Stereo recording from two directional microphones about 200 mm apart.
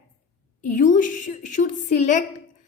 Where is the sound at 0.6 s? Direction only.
40° left (ahead or behind).